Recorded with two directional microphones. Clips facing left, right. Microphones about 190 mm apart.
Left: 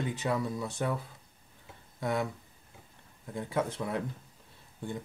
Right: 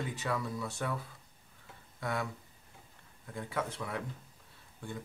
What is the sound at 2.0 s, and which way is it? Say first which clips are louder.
Speech: left 5 dB; 20° left (ahead or behind).